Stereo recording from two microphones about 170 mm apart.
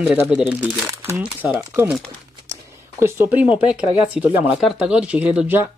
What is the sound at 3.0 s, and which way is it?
Speech, 15° right (ahead or behind).